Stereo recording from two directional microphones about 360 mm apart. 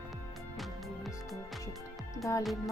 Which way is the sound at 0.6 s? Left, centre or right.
Centre.